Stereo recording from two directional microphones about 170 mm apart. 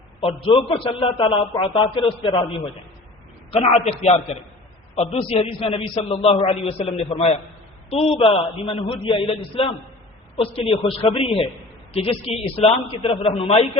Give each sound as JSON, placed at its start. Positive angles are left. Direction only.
{"t": 0.3, "sound": "a man's voice", "side_deg": 30}
{"t": 3.5, "sound": "a man's voice", "side_deg": 35}